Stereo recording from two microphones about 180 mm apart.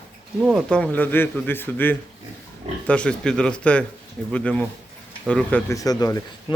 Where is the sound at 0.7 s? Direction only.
5° left (ahead or behind).